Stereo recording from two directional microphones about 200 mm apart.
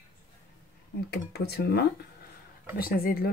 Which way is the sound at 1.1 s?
55° left (ahead or behind).